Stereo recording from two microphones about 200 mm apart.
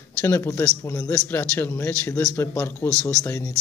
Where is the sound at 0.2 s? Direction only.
15° left (ahead or behind).